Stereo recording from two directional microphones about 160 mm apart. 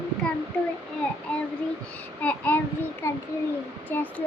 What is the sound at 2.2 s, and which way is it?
Speech, 10° left (ahead or behind).